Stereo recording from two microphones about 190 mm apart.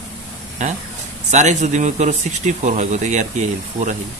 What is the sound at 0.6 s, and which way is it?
Speech, 40° right (ahead or behind).